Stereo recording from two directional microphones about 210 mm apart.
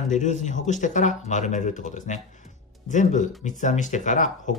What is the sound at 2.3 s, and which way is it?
Music, 35° left (ahead or behind).